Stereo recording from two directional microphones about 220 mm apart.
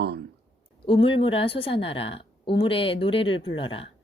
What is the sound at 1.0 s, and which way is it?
A woman's voice, 25° left (ahead or behind).